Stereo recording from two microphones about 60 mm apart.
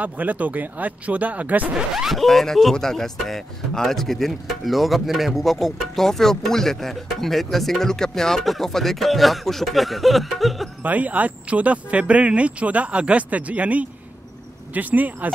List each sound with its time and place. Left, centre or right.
0.0 s speech: right
2.0 s speech: centre
10.8 s speech: right